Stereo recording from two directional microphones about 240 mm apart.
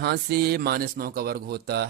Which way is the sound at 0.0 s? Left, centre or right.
Right.